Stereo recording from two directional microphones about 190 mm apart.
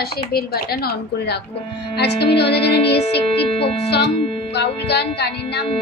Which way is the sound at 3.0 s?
30° left (ahead or behind).